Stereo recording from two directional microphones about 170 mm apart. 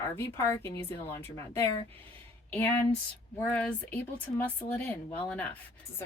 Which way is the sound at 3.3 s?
10° left (ahead or behind).